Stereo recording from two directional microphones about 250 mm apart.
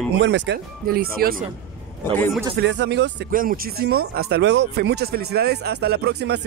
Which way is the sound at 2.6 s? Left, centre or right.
Right.